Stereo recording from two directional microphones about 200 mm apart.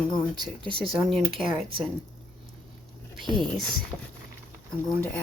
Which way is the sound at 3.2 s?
Centre (ahead or behind).